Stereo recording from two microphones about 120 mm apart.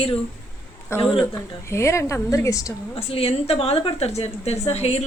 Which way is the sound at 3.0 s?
55° left (ahead or behind).